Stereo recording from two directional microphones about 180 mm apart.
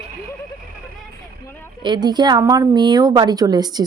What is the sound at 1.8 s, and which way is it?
Speech, 25° right (ahead or behind).